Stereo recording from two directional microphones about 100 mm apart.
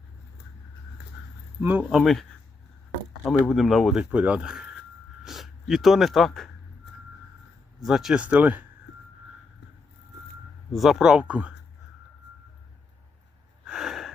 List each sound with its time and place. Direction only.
1.9 s speech: centre (ahead or behind)
3.2 s speech: centre (ahead or behind)
4.1 s speech: 15° right (ahead or behind); by 6.5 s 5° left (ahead or behind)
7.9 s speech: 5° right (ahead or behind)
8.2 s speech: 15° right (ahead or behind)
10.7 s speech: centre (ahead or behind)
13.7 s gasp: 5° right (ahead or behind)